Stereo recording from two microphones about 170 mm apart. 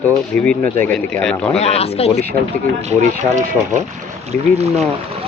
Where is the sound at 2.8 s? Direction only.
45° right (ahead or behind).